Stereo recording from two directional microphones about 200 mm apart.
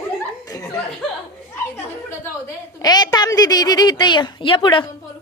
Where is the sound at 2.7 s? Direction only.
20° left (ahead or behind).